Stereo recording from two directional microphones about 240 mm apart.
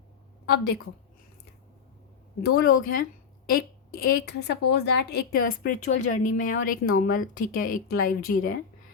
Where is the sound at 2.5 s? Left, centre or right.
Left.